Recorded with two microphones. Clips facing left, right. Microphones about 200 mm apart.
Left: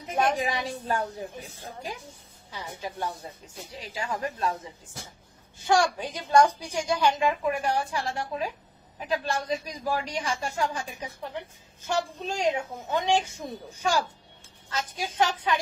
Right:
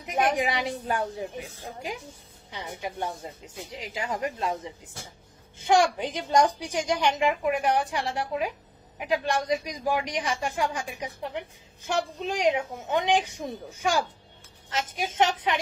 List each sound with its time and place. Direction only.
0.0 s a man's voice: 15° right (ahead or behind)
14.7 s speech: 20° right (ahead or behind)